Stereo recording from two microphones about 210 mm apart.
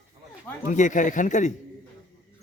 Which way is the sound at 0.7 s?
35° left (ahead or behind).